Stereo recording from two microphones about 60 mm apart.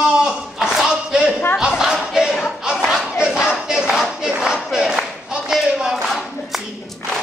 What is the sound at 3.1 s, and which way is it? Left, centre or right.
Battle cry, centre.